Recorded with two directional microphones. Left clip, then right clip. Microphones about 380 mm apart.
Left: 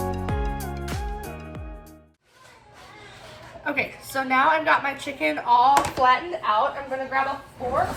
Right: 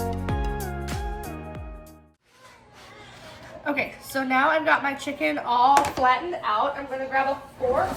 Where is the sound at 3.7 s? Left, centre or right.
Centre.